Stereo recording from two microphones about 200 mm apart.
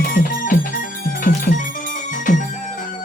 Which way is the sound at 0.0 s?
45° left (ahead or behind).